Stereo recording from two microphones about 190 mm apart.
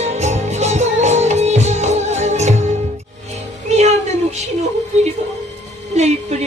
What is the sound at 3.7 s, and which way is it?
Music, 35° right (ahead or behind).